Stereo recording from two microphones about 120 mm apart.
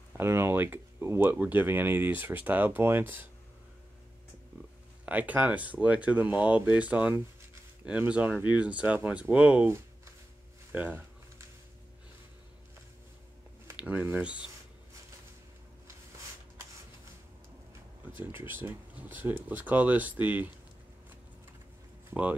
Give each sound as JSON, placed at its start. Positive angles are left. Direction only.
{"t": 0.2, "sound": "speech", "side_deg": -20}
{"t": 5.0, "sound": "speech", "side_deg": -15}
{"t": 10.7, "sound": "speech", "side_deg": -15}
{"t": 13.7, "sound": "speech", "side_deg": -15}
{"t": 18.3, "sound": "speech", "side_deg": -20}